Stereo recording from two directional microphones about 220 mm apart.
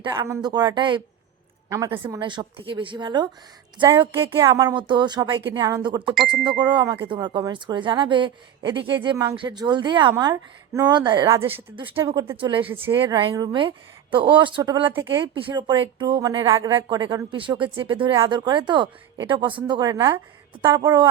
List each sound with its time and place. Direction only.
0.0 s speech: 15° right (ahead or behind)
11.8 s speech: 20° right (ahead or behind)